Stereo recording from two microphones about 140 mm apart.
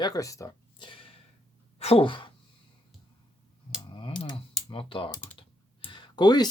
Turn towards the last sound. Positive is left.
turn(degrees=30)  # may be behind; listen again after turning